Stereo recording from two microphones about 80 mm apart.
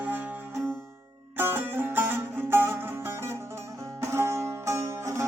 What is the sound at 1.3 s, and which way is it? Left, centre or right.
Music, right.